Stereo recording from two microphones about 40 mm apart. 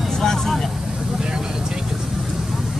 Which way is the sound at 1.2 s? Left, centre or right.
Right.